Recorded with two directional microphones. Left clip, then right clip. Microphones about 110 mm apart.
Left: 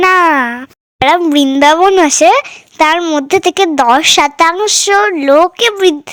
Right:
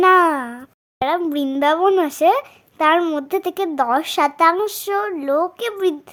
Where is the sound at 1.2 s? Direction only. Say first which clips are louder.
Left 11 dB; 25° left (ahead or behind).